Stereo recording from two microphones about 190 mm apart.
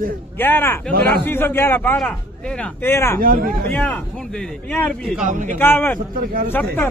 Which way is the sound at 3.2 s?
45° right (ahead or behind).